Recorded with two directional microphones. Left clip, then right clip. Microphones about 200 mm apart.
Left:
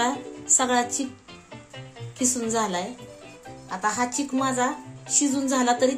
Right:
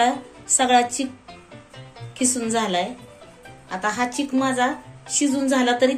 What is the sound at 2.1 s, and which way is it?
A woman's voice, 45° left (ahead or behind).